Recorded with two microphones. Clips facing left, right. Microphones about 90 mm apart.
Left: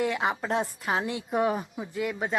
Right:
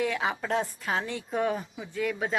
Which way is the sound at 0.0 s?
5° left (ahead or behind).